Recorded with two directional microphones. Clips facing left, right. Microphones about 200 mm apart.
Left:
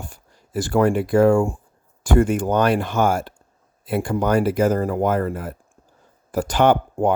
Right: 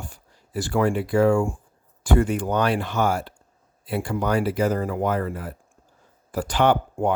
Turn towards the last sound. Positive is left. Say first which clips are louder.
# left 3 dB
turn(degrees=45)  # may be behind; listen again after turning